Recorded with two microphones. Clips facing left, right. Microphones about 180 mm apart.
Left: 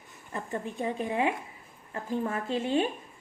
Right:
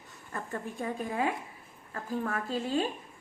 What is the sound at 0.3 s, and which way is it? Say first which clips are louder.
A woman's voice: left 3 dB; 20° left (ahead or behind).